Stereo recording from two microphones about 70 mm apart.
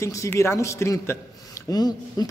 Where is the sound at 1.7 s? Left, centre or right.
Left.